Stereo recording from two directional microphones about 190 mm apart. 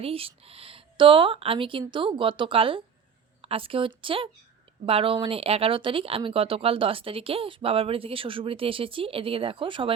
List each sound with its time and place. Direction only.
0.0 s speech: 30° right (ahead or behind)